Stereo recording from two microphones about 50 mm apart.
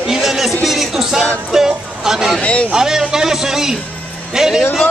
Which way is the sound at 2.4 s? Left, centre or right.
Left.